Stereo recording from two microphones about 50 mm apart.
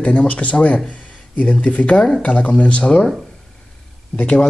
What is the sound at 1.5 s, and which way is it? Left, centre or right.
Speech, left.